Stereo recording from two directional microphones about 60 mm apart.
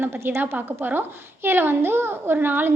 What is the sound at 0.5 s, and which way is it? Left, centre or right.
A woman's voice, right.